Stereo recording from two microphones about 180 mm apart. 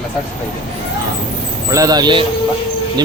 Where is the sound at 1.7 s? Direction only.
20° right (ahead or behind).